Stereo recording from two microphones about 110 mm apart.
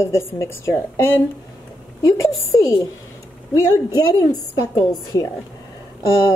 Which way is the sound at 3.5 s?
25° left (ahead or behind).